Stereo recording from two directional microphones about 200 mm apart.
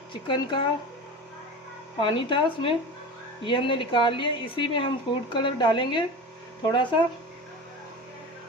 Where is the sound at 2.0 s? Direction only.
25° left (ahead or behind).